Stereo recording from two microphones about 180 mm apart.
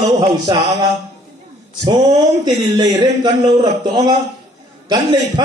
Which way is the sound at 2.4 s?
20° right (ahead or behind).